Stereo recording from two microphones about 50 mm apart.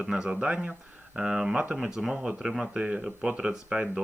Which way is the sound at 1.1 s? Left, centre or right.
Centre.